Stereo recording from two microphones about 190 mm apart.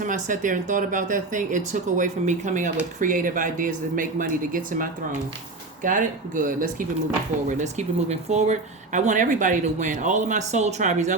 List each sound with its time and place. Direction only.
0.0 s speech: 45° right (ahead or behind)